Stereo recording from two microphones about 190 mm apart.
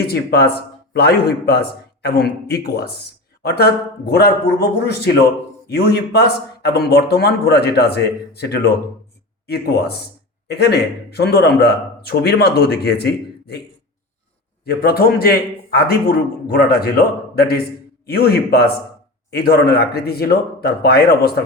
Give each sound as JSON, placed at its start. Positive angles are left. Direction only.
{"t": 0.0, "sound": "speech", "side_deg": 55}
{"t": 14.6, "sound": "a man's voice", "side_deg": 55}